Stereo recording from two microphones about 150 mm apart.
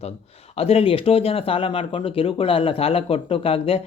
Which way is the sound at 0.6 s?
40° left (ahead or behind).